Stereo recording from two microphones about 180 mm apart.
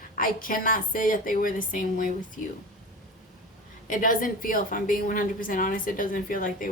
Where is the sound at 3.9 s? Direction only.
50° left (ahead or behind).